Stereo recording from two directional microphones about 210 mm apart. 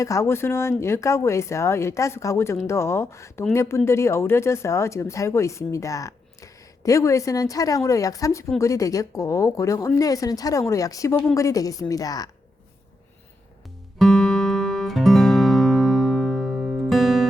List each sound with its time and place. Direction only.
0.0 s speech: 15° left (ahead or behind)
14.0 s music: centre (ahead or behind)